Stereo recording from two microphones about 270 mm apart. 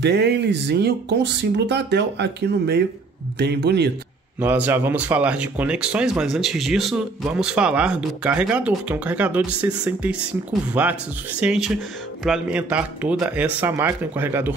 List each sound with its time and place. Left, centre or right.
0.0 s speech: right
4.4 s speech: centre